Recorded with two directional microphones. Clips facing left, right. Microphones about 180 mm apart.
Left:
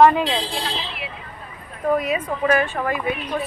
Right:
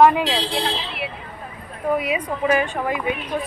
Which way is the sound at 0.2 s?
75° right (ahead or behind).